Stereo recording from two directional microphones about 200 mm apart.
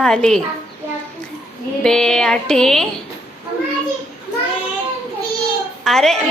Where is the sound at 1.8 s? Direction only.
Centre (ahead or behind).